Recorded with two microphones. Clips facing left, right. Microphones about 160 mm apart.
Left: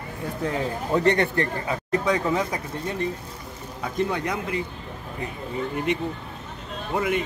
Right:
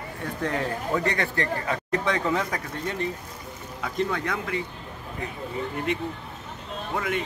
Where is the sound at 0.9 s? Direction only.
25° left (ahead or behind).